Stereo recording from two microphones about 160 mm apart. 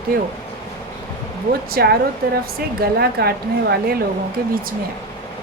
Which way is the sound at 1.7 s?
75° right (ahead or behind).